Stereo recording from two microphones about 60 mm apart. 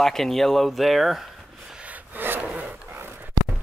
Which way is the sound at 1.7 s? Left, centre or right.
Right.